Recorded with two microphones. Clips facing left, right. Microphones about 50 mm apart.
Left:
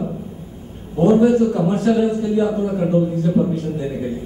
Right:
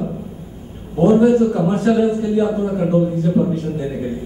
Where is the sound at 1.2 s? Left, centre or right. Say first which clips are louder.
Right 1 dB; right.